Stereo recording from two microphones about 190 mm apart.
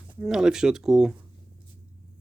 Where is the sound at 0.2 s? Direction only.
5° right (ahead or behind).